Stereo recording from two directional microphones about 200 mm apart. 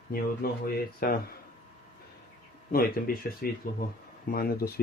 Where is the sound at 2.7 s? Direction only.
45° left (ahead or behind).